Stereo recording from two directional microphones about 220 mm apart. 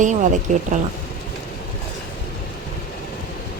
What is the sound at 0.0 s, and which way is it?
Speech, 35° right (ahead or behind).